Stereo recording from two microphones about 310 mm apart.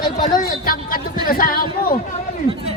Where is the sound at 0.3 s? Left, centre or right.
Left.